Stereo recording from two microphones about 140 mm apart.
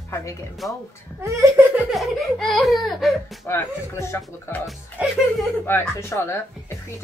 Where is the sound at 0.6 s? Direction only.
Centre (ahead or behind).